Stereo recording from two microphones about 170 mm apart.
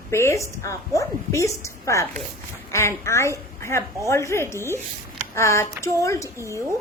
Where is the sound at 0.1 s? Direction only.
15° left (ahead or behind).